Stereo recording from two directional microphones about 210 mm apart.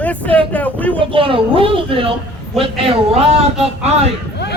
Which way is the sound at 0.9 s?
25° right (ahead or behind).